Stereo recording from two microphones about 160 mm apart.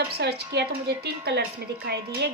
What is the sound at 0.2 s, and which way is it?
A woman's voice, 90° right.